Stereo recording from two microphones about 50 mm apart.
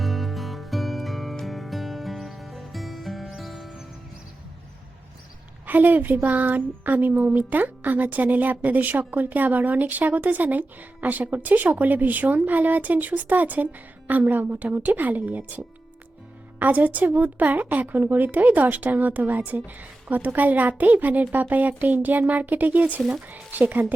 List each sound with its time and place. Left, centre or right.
0.0 s music: centre
5.6 s a woman's voice: right